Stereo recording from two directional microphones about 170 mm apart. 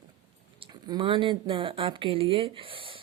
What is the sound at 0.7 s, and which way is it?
Speech, 25° right (ahead or behind).